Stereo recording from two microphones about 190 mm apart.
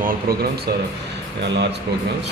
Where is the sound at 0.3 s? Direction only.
55° right (ahead or behind).